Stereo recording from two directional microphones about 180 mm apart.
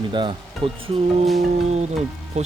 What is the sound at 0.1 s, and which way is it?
Speech, 25° right (ahead or behind).